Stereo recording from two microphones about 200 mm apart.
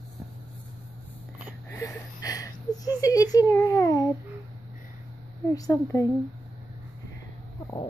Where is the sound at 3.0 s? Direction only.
20° left (ahead or behind).